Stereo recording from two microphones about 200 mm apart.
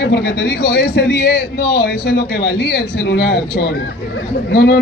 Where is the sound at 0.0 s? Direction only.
55° left (ahead or behind).